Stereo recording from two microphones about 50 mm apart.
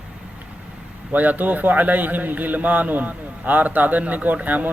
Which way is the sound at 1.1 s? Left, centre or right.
Right.